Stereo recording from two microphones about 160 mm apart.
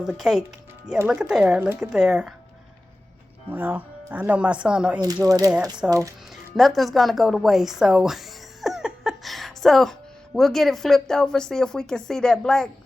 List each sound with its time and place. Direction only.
0.0 s speech: 5° right (ahead or behind)
3.5 s speech: 10° right (ahead or behind)
5.2 s speech: 20° right (ahead or behind)
6.3 s speech: centre (ahead or behind)